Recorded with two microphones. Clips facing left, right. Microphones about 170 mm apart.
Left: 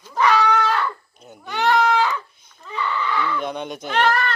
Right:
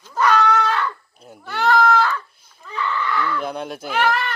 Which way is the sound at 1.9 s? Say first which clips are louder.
Right 1 dB; 15° left (ahead or behind).